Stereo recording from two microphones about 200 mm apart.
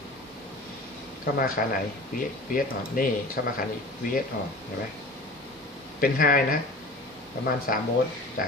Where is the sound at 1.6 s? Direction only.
45° left (ahead or behind).